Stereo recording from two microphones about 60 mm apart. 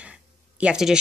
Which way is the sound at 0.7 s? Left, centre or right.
Centre.